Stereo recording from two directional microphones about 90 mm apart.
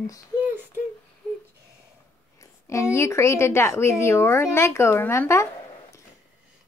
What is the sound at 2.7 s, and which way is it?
A woman's voice, 30° left (ahead or behind).